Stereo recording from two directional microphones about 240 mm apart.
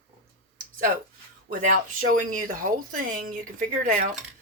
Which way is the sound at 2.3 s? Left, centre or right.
Right.